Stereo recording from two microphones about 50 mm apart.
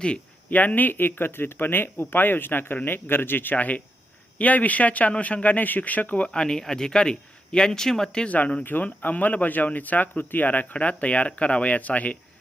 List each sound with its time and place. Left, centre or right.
0.5 s speech: left; by 8.3 s centre
8.3 s speech: left